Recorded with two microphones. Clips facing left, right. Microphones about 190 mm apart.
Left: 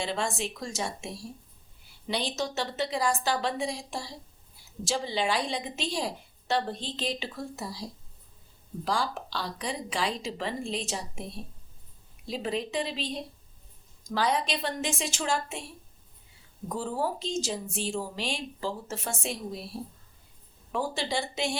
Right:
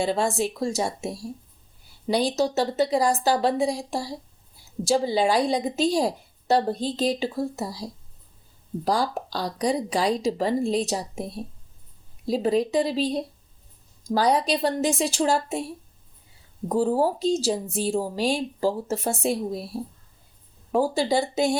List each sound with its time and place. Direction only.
0.0 s a woman's voice: 40° right (ahead or behind)
16.6 s a woman's voice: 40° right (ahead or behind)